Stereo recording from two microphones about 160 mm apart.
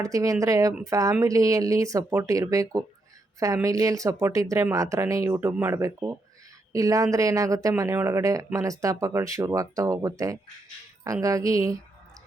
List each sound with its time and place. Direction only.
0.0 s speech: 20° right (ahead or behind)